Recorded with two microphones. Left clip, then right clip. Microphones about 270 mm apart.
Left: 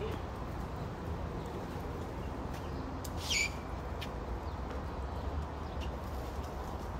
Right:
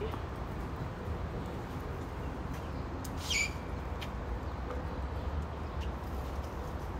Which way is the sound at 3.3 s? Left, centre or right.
Centre.